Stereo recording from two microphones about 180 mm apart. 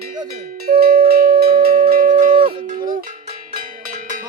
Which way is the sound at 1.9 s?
50° right (ahead or behind).